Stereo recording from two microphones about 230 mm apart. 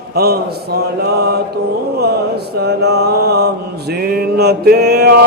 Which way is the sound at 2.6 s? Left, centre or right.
Right.